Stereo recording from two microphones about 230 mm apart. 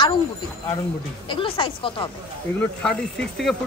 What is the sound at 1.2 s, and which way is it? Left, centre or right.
Speech, left.